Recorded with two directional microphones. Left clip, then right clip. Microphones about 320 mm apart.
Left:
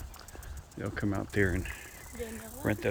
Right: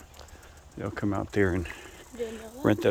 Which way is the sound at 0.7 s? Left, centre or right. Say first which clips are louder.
Right 4 dB; centre.